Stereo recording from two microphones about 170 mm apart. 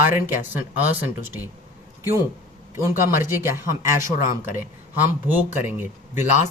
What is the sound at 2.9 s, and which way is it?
Speech, 55° left (ahead or behind).